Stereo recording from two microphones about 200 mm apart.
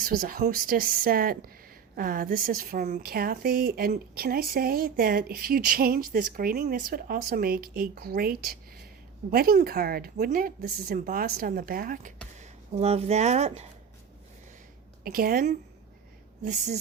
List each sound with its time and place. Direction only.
0.0 s a woman's voice: 45° right (ahead or behind)
12.4 s speech: 30° right (ahead or behind)
15.0 s a woman's voice: 45° right (ahead or behind)
16.4 s speech: 35° right (ahead or behind)